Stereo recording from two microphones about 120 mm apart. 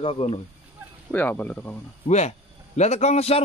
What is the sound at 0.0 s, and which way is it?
Speech, 55° left (ahead or behind).